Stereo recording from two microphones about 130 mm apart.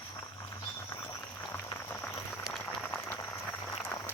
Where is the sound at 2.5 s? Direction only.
5° left (ahead or behind).